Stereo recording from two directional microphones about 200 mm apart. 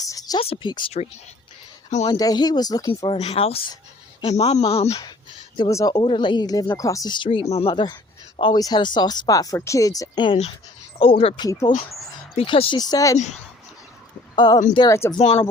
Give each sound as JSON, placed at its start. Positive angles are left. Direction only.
{"t": 0.0, "sound": "speech", "side_deg": 20}
{"t": 2.0, "sound": "speech", "side_deg": 20}
{"t": 3.2, "sound": "a man's voice", "side_deg": 30}
{"t": 5.5, "sound": "speech", "side_deg": 20}
{"t": 14.3, "sound": "speech", "side_deg": 20}